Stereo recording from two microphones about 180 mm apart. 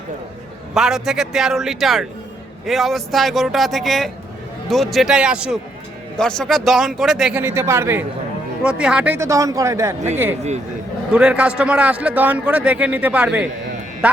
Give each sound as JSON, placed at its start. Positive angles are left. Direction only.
{"t": 0.7, "sound": "a man's voice", "side_deg": -5}
{"t": 11.1, "sound": "a man's voice", "side_deg": -5}